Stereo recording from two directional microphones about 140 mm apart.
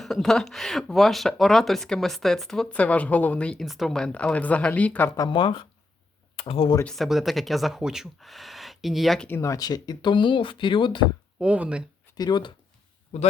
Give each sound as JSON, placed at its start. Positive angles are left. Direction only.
{"t": 0.0, "sound": "speech", "side_deg": 0}
{"t": 5.1, "sound": "speech", "side_deg": 30}
{"t": 6.8, "sound": "speech", "side_deg": 0}
{"t": 9.3, "sound": "speech", "side_deg": 20}
{"t": 11.3, "sound": "speech", "side_deg": -10}
{"t": 12.1, "sound": "speech", "side_deg": 30}
{"t": 13.1, "sound": "speech", "side_deg": 55}